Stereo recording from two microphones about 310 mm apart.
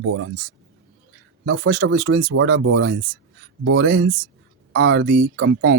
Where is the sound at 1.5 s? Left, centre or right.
Right.